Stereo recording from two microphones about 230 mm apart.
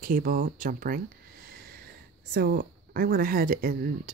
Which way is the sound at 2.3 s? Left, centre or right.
Right.